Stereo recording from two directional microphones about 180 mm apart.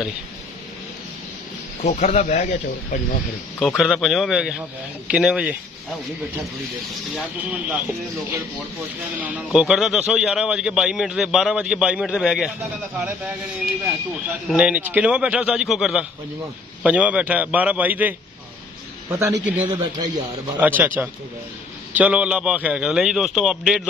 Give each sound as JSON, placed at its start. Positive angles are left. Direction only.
{"t": 1.8, "sound": "speech", "side_deg": 40}
{"t": 3.5, "sound": "speech", "side_deg": 5}
{"t": 7.2, "sound": "a man's voice", "side_deg": -5}
{"t": 9.2, "sound": "speech", "side_deg": -5}
{"t": 14.5, "sound": "a man's voice", "side_deg": -5}
{"t": 19.8, "sound": "a man's voice", "side_deg": -25}
{"t": 20.5, "sound": "a man's voice", "side_deg": -10}